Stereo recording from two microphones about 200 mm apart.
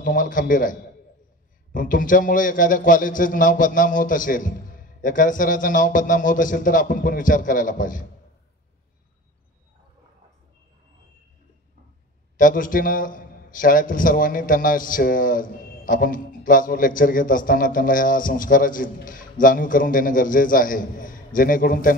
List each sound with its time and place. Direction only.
0.0 s a man's voice: 45° left (ahead or behind)
12.4 s a man's voice: 45° left (ahead or behind)